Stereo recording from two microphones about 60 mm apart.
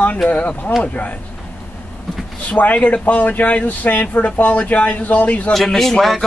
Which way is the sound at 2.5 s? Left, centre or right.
Left.